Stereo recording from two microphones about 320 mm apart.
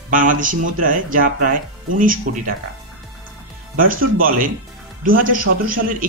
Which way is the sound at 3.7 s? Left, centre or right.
Right.